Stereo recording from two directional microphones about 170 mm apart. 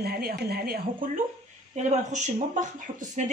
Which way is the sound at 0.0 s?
65° right (ahead or behind).